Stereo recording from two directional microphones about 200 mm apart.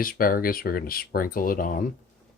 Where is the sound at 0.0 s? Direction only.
45° left (ahead or behind).